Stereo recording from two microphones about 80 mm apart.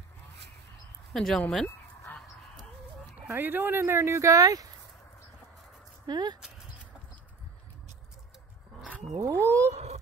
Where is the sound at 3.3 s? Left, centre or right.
Right.